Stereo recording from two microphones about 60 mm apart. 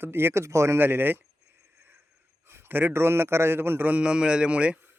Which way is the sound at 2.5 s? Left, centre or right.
Right.